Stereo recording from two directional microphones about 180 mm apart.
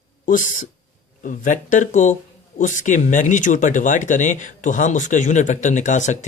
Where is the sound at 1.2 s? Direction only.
45° left (ahead or behind).